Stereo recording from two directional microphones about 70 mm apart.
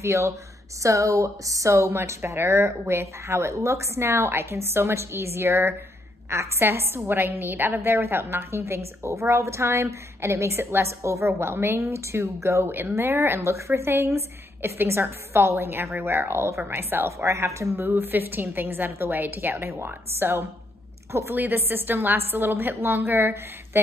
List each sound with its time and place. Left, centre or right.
0.0 s a woman's voice: right
17.2 s a woman's voice: right
21.4 s a woman's voice: right